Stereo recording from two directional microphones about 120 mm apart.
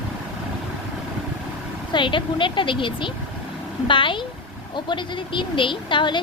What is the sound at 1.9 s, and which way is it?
A woman's voice, 45° left (ahead or behind).